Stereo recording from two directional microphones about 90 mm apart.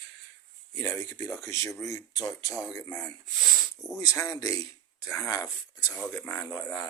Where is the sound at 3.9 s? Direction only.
40° left (ahead or behind).